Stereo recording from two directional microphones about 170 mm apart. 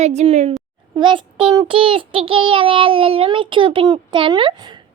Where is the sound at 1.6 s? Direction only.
30° right (ahead or behind).